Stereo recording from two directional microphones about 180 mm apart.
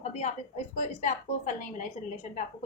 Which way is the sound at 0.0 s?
40° left (ahead or behind).